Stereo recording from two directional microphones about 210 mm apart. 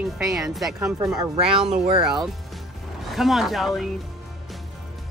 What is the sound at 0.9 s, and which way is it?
Speech, 15° right (ahead or behind).